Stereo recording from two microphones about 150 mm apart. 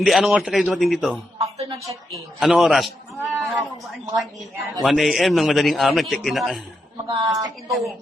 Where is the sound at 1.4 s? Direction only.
45° right (ahead or behind).